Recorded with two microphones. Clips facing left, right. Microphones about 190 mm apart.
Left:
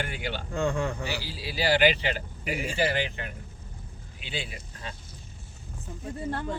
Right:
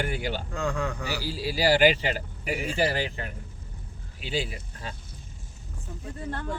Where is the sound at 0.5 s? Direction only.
Centre (ahead or behind).